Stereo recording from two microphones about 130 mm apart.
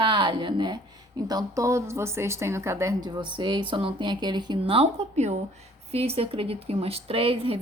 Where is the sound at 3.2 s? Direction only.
35° right (ahead or behind).